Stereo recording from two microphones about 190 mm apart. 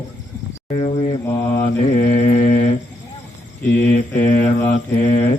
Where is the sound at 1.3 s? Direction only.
15° left (ahead or behind).